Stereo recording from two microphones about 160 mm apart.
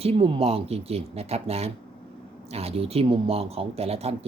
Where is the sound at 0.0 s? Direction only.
35° right (ahead or behind).